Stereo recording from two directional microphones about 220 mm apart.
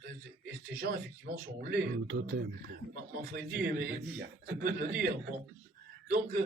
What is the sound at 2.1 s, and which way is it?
Speech, 60° right (ahead or behind).